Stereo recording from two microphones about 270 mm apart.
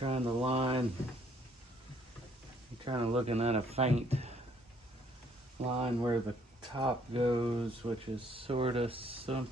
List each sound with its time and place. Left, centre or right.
0.0 s speech: right
2.8 s speech: centre
5.7 s speech: centre